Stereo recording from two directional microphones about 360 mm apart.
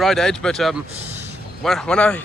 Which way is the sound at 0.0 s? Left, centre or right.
Centre.